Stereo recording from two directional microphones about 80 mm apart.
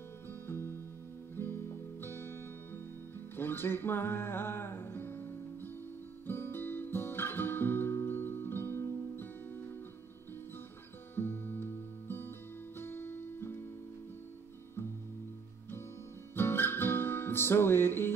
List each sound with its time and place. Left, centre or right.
0.3 s music: left
11.1 s music: left
16.3 s music: left